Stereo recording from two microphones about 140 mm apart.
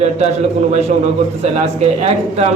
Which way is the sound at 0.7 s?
55° right (ahead or behind).